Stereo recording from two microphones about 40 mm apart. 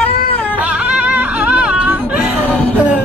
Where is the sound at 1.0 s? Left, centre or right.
Right.